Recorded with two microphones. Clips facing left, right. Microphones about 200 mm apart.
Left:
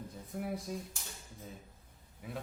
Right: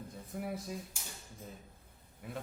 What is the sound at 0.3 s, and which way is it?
Speech, centre (ahead or behind).